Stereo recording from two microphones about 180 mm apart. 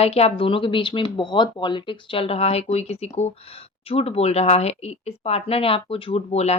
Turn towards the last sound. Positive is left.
turn(degrees=35)  # may be behind; listen again after turning